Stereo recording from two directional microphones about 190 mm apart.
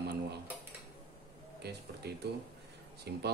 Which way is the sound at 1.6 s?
60° right (ahead or behind).